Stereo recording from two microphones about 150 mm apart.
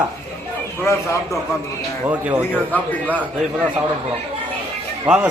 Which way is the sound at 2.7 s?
10° left (ahead or behind).